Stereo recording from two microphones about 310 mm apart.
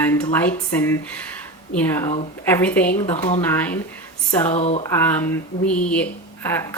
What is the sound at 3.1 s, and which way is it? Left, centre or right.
Speech, centre.